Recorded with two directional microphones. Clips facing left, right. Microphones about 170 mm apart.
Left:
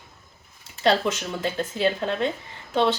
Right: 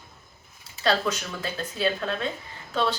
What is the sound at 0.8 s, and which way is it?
A woman's voice, 25° left (ahead or behind).